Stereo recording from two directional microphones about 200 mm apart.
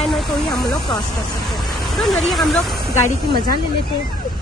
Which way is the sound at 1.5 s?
Centre (ahead or behind).